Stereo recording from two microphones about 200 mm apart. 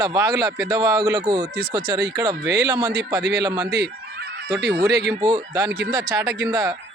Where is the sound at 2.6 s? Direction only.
20° right (ahead or behind).